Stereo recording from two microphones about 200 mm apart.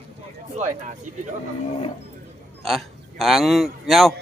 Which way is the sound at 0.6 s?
35° right (ahead or behind).